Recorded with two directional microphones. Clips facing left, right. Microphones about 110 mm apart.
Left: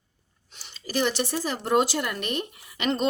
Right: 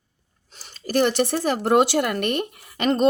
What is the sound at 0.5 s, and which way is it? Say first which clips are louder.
Speech: right 7 dB; 45° right (ahead or behind).